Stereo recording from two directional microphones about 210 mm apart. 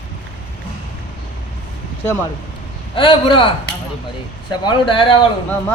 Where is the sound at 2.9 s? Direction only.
25° left (ahead or behind).